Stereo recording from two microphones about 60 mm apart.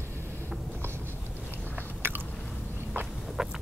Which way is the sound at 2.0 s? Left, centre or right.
Right.